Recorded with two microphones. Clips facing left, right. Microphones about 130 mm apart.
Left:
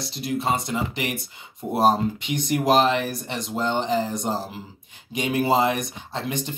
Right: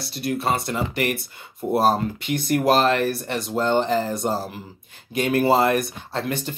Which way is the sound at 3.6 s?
55° right (ahead or behind).